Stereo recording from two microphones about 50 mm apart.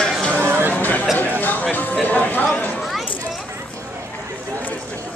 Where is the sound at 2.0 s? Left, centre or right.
Left.